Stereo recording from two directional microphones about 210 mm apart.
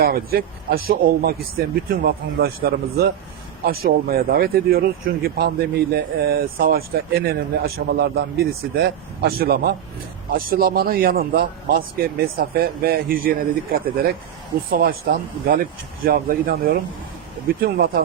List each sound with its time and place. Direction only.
0.0 s speech: 45° right (ahead or behind)